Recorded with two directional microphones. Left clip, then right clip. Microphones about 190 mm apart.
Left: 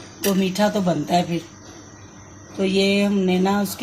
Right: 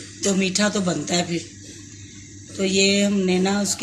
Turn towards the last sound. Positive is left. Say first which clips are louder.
# left 1 dB
turn(degrees=35)  # may be behind; listen again after turning